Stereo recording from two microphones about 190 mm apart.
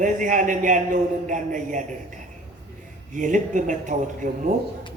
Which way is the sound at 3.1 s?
45° right (ahead or behind).